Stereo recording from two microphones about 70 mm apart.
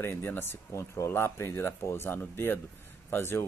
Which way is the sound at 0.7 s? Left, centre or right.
Left.